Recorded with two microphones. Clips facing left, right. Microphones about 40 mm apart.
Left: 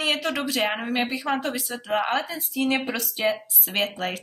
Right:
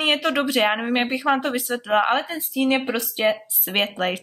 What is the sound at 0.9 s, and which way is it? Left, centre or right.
Speech, right.